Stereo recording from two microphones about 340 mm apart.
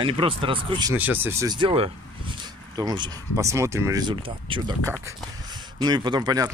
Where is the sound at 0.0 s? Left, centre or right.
Centre.